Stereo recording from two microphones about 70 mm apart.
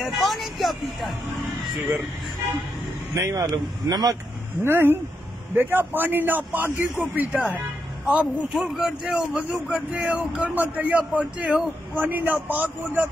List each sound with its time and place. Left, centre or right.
0.0 s speech: centre
3.2 s speech: right
4.6 s a man's voice: right
8.5 s a man's voice: centre; by 13.1 s right